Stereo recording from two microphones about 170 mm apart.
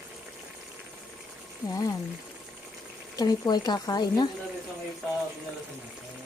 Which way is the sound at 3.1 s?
25° left (ahead or behind).